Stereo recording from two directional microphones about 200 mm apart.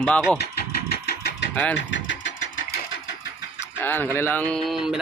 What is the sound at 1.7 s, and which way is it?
Engine, 65° left (ahead or behind).